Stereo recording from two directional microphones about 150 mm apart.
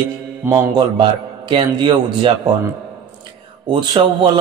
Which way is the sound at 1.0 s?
35° right (ahead or behind).